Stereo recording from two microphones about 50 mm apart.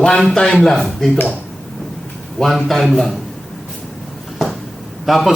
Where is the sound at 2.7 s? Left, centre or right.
Centre.